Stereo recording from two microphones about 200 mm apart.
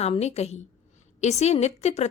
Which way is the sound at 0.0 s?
30° left (ahead or behind).